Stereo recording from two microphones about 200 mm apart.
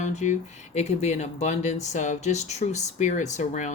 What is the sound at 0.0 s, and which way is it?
Speech, 35° left (ahead or behind).